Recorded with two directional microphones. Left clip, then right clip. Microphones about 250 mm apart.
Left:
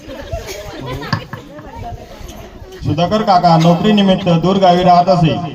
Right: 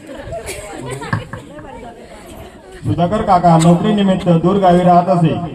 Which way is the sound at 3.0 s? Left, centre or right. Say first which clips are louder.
Left 1 dB; left.